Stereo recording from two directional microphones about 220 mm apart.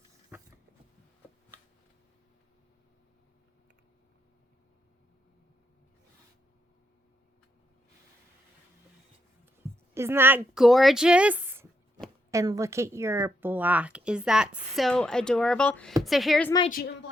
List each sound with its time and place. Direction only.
0.3 s a sound: 5° right (ahead or behind)
9.9 s a woman's voice: 10° right (ahead or behind)
16.6 s a woman's voice: 40° left (ahead or behind)